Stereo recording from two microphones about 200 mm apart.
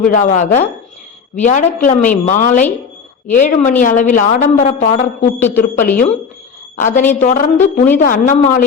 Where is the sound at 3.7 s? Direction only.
40° left (ahead or behind).